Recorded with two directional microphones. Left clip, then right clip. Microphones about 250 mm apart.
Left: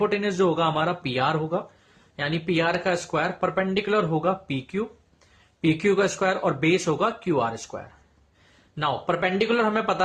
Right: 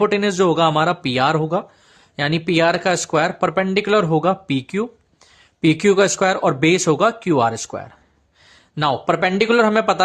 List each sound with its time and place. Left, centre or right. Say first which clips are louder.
0.0 s speech: right 6 dB; right